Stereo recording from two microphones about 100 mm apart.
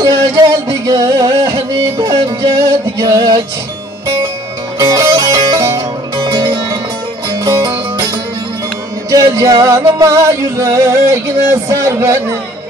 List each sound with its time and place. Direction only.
0.0 s music: 35° right (ahead or behind)
4.7 s music: 35° right (ahead or behind)
6.2 s music: 45° right (ahead or behind)
9.1 s music: 35° right (ahead or behind)